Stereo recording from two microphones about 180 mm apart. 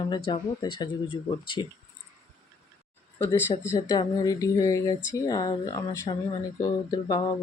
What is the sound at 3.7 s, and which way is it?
Speech, 20° left (ahead or behind).